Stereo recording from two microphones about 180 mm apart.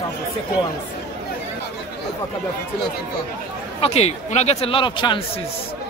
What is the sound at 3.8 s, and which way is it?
Speech, 35° left (ahead or behind).